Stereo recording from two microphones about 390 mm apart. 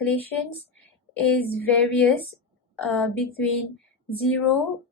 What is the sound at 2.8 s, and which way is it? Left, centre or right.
Speech, centre.